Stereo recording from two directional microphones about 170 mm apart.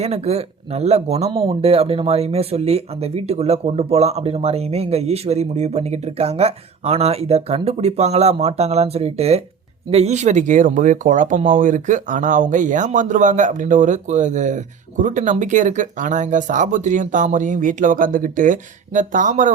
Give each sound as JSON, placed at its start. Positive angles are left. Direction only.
{"t": 0.0, "sound": "speech", "side_deg": -40}